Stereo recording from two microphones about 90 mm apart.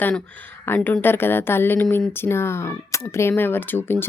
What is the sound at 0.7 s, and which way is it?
A woman's voice, 25° left (ahead or behind).